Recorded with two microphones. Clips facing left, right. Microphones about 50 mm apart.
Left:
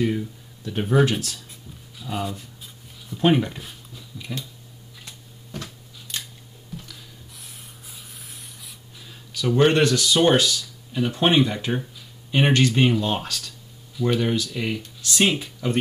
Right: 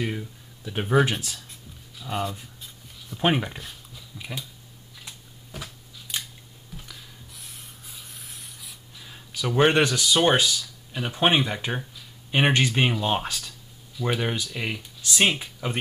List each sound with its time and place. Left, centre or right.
0.0 s speech: centre
3.2 s speech: centre
4.2 s speech: centre
5.0 s camera: centre
6.8 s spray: centre
9.1 s speech: centre
13.0 s a sound: centre
14.0 s speech: centre